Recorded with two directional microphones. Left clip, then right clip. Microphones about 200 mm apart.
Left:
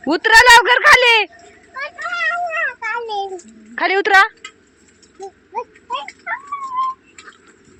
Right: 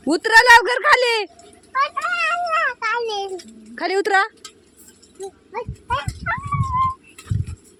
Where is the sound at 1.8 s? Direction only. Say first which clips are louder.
Right 3 dB; 10° right (ahead or behind).